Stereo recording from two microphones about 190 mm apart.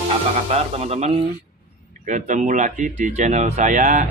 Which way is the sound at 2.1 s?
40° right (ahead or behind).